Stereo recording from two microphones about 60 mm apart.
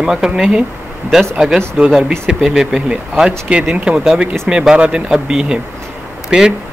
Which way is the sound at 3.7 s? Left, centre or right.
Centre.